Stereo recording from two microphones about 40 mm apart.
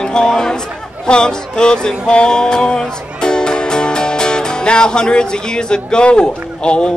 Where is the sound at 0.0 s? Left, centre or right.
Centre.